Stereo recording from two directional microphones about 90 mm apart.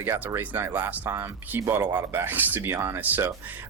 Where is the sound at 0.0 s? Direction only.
30° right (ahead or behind).